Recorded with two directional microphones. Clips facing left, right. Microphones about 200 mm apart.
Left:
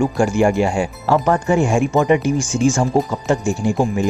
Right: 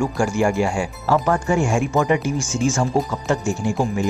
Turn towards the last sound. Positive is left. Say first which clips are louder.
# left 3 dB
turn(degrees=15)  # may be behind; listen again after turning